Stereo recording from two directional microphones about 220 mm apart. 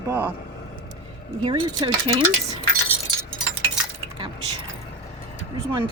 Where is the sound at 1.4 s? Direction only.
20° right (ahead or behind).